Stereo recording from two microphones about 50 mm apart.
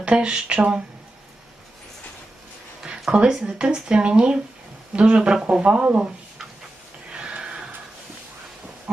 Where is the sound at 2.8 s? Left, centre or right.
Right.